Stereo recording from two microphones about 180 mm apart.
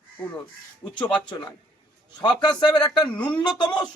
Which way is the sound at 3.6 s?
25° left (ahead or behind).